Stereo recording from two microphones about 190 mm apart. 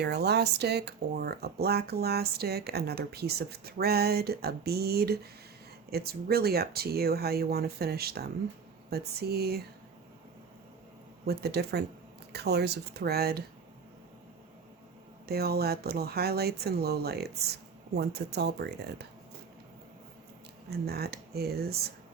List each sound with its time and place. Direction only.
0.0 s speech: 60° right (ahead or behind)
11.3 s speech: 55° right (ahead or behind)
15.3 s speech: 55° right (ahead or behind)
20.7 s speech: 55° right (ahead or behind)